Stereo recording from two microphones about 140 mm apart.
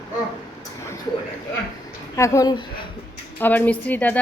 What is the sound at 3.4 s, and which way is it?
Speech, 10° left (ahead or behind).